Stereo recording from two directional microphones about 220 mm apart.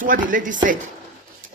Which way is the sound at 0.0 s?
35° right (ahead or behind).